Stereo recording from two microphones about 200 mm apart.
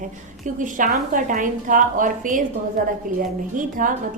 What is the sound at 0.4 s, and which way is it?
A woman's voice, 40° right (ahead or behind).